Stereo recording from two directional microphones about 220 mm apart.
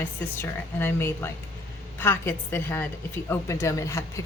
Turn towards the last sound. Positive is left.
turn(degrees=15)  # may be behind; listen again after turning